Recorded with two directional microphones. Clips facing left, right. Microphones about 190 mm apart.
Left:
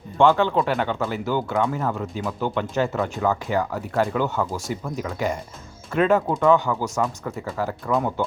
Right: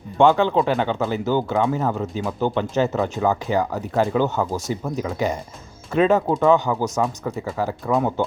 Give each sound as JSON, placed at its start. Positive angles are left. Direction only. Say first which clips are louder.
{"t": 0.2, "sound": "speech", "louder": "right 2 dB", "side_deg": -15}